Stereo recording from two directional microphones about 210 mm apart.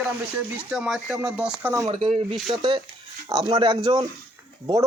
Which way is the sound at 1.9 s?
25° right (ahead or behind).